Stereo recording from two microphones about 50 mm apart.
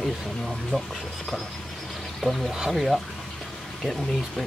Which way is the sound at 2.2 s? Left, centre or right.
Centre.